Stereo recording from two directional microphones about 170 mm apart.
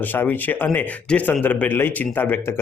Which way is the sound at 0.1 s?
10° left (ahead or behind).